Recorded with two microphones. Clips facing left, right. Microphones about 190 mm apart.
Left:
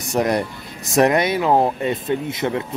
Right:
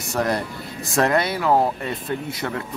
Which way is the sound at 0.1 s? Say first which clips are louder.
Left 4 dB; 20° left (ahead or behind).